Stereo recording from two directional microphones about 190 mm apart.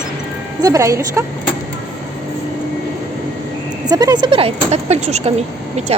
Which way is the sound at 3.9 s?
20° right (ahead or behind).